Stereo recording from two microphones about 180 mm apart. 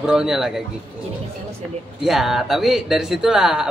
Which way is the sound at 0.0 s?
5° right (ahead or behind).